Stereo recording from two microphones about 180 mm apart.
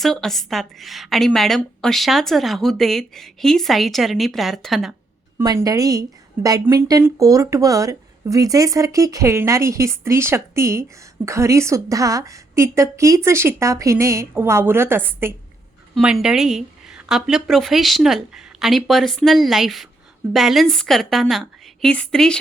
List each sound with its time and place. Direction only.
0.0 s a woman's voice: centre (ahead or behind)
5.4 s a woman's voice: 20° right (ahead or behind); by 22.4 s 5° left (ahead or behind)